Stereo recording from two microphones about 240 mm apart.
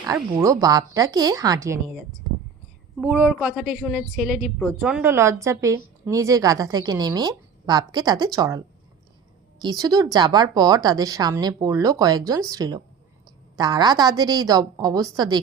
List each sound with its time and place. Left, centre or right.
0.1 s a woman's voice: centre
3.0 s a woman's voice: centre